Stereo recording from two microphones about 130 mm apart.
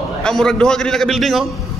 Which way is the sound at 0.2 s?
5° left (ahead or behind).